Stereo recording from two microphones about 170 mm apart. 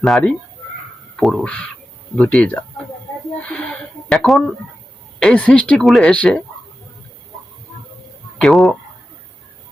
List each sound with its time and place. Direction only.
0.0 s speech: 5° left (ahead or behind)
8.4 s speech: centre (ahead or behind)